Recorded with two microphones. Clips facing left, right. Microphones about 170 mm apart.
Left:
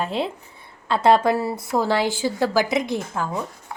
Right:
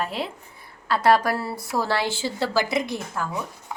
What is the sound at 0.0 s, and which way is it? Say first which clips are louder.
Speech: left 4 dB; 25° left (ahead or behind).